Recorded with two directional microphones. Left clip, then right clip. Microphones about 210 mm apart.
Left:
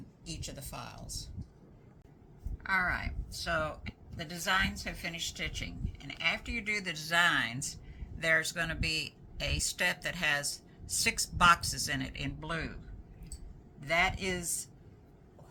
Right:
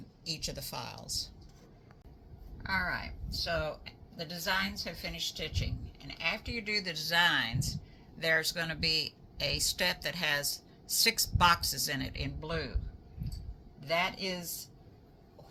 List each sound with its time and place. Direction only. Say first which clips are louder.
0.3 s speech: right 6 dB; 30° right (ahead or behind)
2.6 s speech: left 2 dB; 15° right (ahead or behind)
13.8 s speech: left 2 dB; 15° right (ahead or behind)